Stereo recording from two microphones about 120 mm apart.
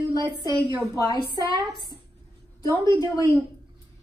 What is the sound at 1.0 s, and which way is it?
Speech, 35° left (ahead or behind).